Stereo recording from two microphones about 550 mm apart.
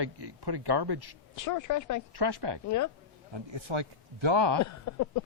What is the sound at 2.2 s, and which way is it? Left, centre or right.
Speech, right.